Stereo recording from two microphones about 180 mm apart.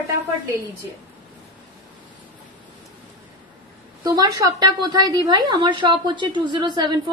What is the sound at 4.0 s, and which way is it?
A woman's voice, 20° right (ahead or behind).